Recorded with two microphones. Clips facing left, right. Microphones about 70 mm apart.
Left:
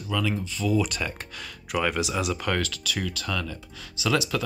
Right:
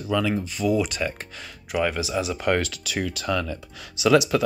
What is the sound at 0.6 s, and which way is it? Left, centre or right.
Speech, centre.